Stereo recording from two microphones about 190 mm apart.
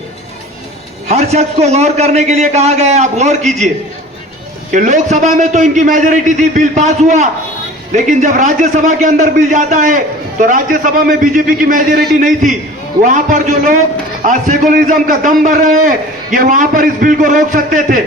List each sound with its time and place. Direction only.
1.0 s a man's voice: 35° right (ahead or behind)
4.7 s a man's voice: 40° right (ahead or behind)